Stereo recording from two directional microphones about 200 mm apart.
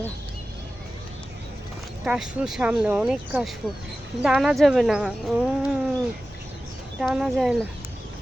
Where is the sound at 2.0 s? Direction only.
5° right (ahead or behind).